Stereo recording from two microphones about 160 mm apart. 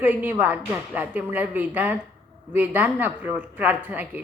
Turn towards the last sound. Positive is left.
turn(degrees=-10)  # may be behind; listen again after turning